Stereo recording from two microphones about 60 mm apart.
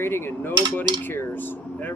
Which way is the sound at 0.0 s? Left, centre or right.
Left.